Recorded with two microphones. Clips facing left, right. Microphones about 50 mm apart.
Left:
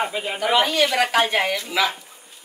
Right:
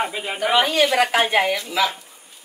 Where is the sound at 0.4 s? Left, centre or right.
Right.